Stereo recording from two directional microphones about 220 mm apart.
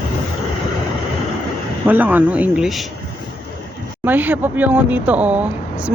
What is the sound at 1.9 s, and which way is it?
Speech, 5° right (ahead or behind).